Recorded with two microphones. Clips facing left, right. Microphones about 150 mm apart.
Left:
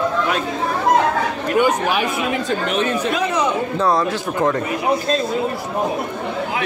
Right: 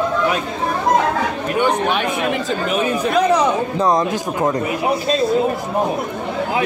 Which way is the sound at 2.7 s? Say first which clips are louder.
Right 5 dB; 10° right (ahead or behind).